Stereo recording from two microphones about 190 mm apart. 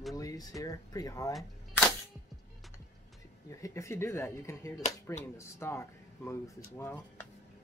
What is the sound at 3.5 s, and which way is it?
Speech, 15° left (ahead or behind).